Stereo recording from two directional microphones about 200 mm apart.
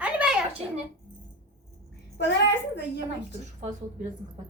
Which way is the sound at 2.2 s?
60° left (ahead or behind).